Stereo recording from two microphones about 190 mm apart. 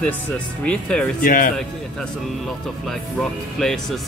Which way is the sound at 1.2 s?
45° left (ahead or behind).